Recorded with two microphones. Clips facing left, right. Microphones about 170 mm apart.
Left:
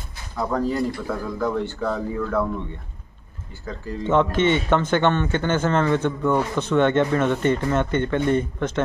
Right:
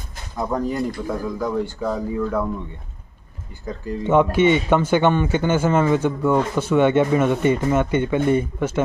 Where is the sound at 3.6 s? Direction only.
10° right (ahead or behind).